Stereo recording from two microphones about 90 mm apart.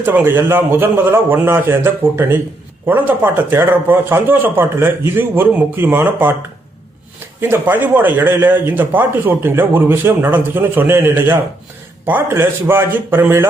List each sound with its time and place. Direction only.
0.0 s speech: 20° right (ahead or behind)
7.4 s speech: 20° right (ahead or behind)